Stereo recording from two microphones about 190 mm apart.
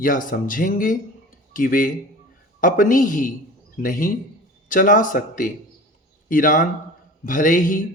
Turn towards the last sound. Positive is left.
turn(degrees=45)  # may be behind; listen again after turning